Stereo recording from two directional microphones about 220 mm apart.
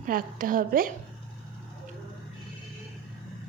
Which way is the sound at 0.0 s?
40° right (ahead or behind).